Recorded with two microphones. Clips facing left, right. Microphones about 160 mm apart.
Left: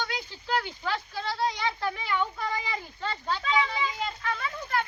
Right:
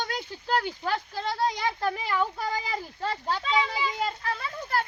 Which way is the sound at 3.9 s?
40° right (ahead or behind).